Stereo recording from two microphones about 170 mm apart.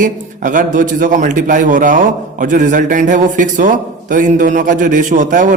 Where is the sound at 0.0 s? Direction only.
50° right (ahead or behind).